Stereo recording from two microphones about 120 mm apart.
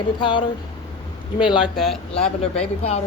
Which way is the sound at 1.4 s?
5° right (ahead or behind).